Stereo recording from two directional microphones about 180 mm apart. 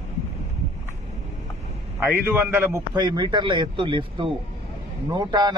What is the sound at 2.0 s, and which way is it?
A man's voice, 10° right (ahead or behind).